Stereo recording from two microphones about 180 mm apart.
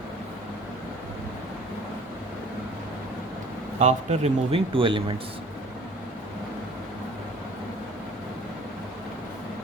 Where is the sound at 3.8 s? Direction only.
40° right (ahead or behind).